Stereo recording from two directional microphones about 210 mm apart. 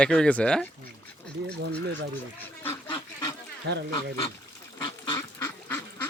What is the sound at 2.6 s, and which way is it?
Duck, 10° left (ahead or behind).